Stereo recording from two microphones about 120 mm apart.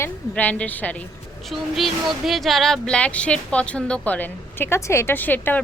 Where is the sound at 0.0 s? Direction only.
15° left (ahead or behind).